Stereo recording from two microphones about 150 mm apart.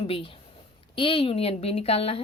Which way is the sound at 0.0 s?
35° left (ahead or behind).